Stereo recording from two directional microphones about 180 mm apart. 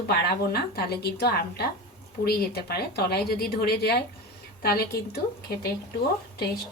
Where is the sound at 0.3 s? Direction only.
60° left (ahead or behind).